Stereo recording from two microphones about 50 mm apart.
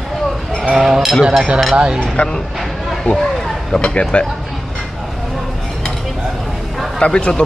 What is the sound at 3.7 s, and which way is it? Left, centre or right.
Speech, centre.